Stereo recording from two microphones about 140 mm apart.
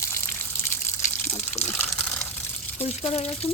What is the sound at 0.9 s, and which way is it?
Water, 20° left (ahead or behind).